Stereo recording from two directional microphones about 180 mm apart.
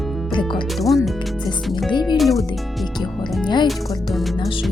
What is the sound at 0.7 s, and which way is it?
Speech, centre (ahead or behind).